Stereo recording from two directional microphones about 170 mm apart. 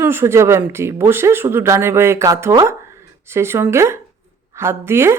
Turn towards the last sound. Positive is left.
turn(degrees=-15)  # may be behind; listen again after turning